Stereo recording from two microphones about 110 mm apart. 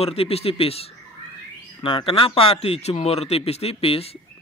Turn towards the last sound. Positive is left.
turn(degrees=60)  # may be behind; listen again after turning